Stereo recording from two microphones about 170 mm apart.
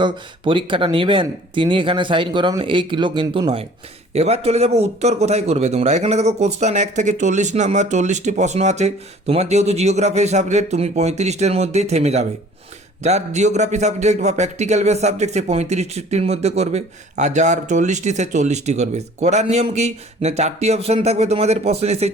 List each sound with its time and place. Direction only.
0.0 s a man's voice: 30° right (ahead or behind)